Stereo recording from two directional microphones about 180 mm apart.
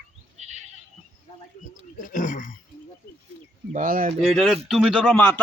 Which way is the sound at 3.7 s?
50° right (ahead or behind).